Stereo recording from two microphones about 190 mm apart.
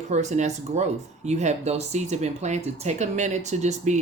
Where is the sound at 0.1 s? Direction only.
35° right (ahead or behind).